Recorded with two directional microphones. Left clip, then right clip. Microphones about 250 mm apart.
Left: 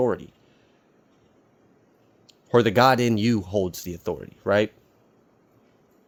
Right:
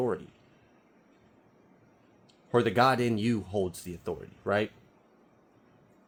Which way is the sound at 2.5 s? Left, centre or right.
Left.